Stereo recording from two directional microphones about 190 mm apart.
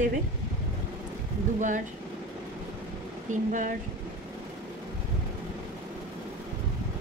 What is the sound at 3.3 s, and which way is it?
Speech, 40° right (ahead or behind).